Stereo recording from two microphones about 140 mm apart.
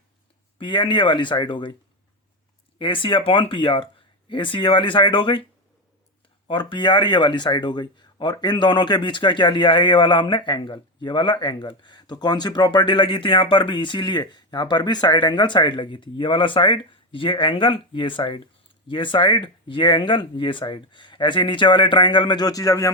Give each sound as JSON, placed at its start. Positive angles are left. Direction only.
{"t": 0.6, "sound": "speech", "side_deg": 35}
{"t": 2.7, "sound": "speech", "side_deg": 35}
{"t": 6.5, "sound": "speech", "side_deg": 35}